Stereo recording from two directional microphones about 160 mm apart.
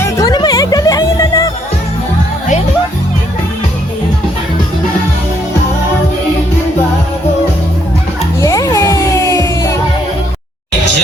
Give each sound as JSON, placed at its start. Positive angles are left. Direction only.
{"t": 0.0, "sound": "music", "side_deg": 20}
{"t": 8.4, "sound": "music", "side_deg": 20}